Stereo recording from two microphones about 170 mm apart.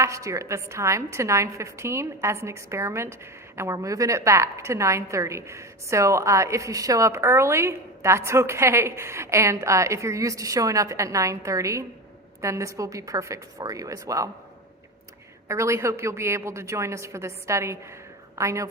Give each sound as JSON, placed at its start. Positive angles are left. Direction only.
{"t": 0.0, "sound": "a woman's voice", "side_deg": -20}
{"t": 15.4, "sound": "a woman's voice", "side_deg": -15}